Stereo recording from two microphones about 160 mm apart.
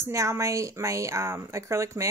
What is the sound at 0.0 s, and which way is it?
A woman's voice, 20° right (ahead or behind).